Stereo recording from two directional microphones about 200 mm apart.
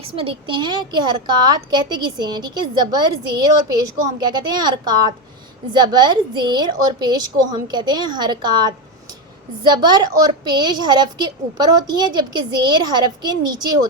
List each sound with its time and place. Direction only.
0.2 s a woman's voice: 25° right (ahead or behind)